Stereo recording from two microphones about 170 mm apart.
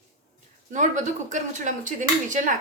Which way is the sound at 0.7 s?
45° right (ahead or behind).